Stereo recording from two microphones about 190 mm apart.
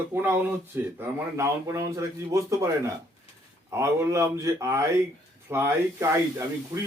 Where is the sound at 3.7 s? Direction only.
15° right (ahead or behind).